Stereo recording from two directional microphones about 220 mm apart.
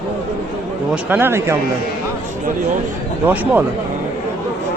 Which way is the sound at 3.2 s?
10° right (ahead or behind).